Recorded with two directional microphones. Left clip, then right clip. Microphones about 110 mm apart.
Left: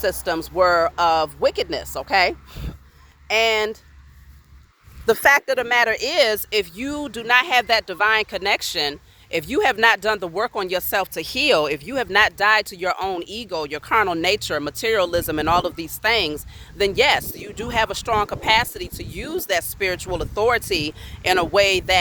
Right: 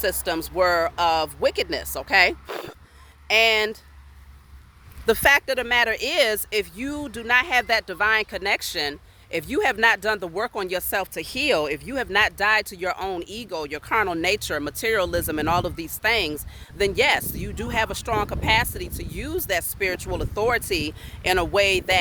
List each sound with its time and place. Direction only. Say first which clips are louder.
0.3 s speech: left 4 dB; 25° right (ahead or behind)
5.2 s speech: left 2 dB; 60° right (ahead or behind)
5.6 s speech: left 3 dB; 15° right (ahead or behind)
5.9 s speech: left 3 dB; 35° right (ahead or behind)
6.5 s speech: left 3 dB; 10° right (ahead or behind); by 21.9 s 30° right (ahead or behind)